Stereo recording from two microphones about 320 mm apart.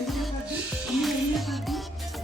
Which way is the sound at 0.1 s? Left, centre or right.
Centre.